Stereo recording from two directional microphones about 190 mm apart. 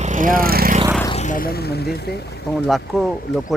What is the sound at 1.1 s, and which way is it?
Speech, 40° left (ahead or behind).